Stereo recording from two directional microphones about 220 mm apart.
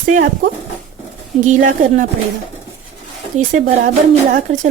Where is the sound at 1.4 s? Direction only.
35° right (ahead or behind).